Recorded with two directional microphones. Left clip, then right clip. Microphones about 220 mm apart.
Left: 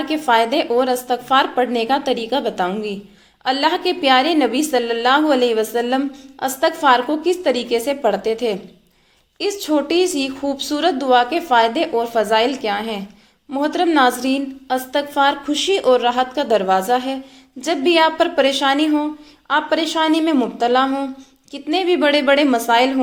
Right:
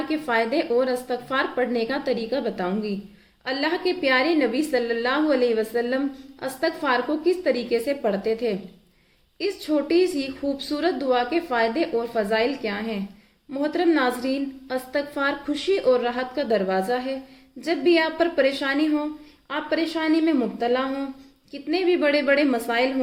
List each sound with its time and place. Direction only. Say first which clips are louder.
0.3 s a woman's voice: left 7 dB; centre (ahead or behind)
3.4 s a woman's voice: left 7 dB; centre (ahead or behind)
16.9 s a sound: left 7 dB; 45° left (ahead or behind)
17.6 s a woman's voice: left 6 dB; centre (ahead or behind)